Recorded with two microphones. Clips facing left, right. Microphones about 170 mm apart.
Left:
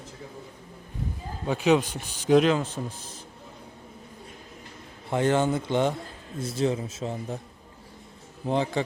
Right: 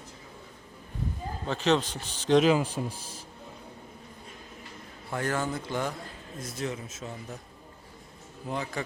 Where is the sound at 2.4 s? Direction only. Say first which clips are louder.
Even; 10° right (ahead or behind).